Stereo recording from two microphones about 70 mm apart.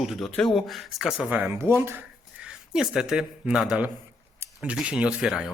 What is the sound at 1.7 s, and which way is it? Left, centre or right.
Speech, right.